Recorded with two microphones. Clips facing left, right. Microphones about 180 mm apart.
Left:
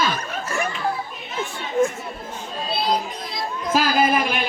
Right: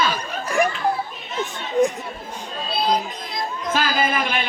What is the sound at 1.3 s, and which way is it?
Speech, centre (ahead or behind).